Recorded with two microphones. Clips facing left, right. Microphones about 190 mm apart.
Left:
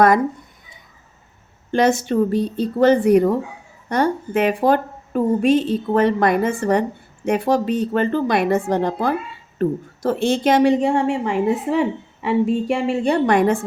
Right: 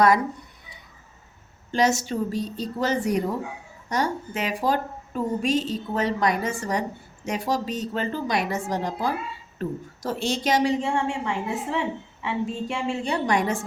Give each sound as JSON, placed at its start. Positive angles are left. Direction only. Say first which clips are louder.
{"t": 1.7, "sound": "a woman's voice", "louder": "left 6 dB", "side_deg": 55}